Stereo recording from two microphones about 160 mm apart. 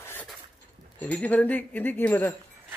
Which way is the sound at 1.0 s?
10° left (ahead or behind).